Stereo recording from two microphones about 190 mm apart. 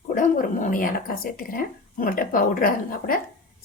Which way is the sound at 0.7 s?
45° left (ahead or behind).